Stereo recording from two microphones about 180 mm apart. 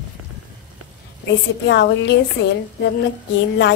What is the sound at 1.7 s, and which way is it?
Speech, 80° left.